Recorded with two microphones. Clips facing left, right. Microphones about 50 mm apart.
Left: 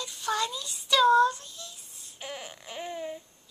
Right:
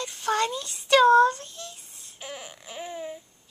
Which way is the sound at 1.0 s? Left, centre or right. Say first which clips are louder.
Right 2 dB; right.